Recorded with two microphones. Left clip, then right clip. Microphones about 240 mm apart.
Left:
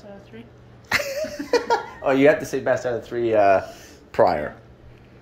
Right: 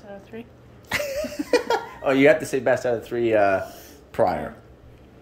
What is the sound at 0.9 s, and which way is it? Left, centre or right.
Speech, centre.